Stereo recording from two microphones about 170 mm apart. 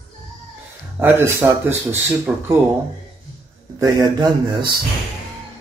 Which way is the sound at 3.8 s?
20° right (ahead or behind).